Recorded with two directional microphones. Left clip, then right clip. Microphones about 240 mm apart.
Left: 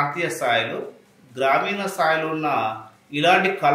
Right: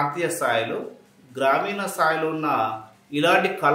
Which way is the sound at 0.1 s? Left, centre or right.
Centre.